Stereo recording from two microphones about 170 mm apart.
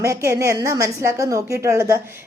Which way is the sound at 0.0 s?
15° right (ahead or behind).